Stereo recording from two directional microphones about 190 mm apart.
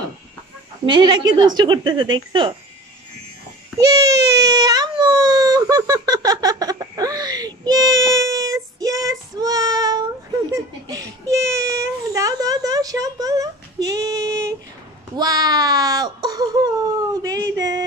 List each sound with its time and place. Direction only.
0.8 s speech: 25° right (ahead or behind)
3.8 s baby cry: 20° right (ahead or behind)
10.5 s a child's voice: 15° right (ahead or behind)